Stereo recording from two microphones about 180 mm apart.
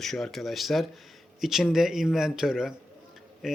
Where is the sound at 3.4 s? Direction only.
5° right (ahead or behind).